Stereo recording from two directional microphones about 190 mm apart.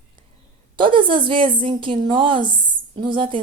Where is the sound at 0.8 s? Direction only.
25° right (ahead or behind).